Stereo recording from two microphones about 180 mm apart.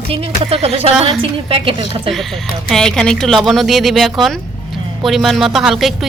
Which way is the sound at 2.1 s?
Centre (ahead or behind).